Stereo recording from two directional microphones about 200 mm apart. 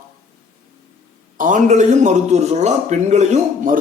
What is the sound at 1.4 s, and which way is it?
A man's voice, 40° right (ahead or behind).